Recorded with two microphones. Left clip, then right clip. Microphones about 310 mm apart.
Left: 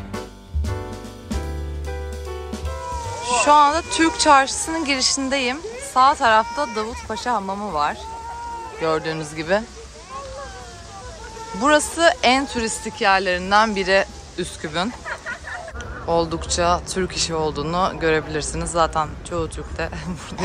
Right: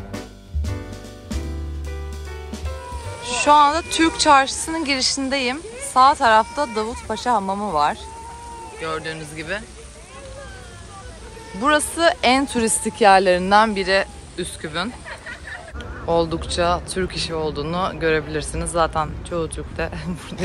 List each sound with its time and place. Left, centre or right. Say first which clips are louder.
3.4 s speech: right 1 dB; centre
8.7 s speech: left 5 dB; centre
11.6 s speech: left 1 dB; centre
16.1 s speech: right 1 dB; centre